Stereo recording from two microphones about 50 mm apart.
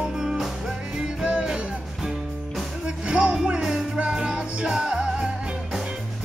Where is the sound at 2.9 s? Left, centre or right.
Right.